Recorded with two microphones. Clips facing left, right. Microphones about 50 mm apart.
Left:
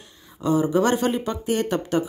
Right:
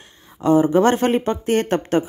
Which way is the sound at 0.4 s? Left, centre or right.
Right.